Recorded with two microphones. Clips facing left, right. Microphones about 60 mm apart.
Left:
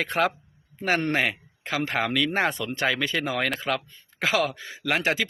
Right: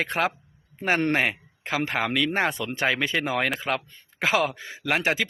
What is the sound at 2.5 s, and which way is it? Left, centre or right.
Speech, right.